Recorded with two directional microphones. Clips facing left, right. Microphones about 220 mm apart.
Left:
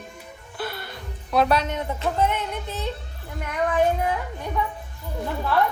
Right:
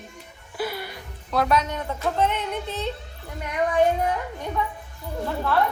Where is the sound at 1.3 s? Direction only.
10° left (ahead or behind).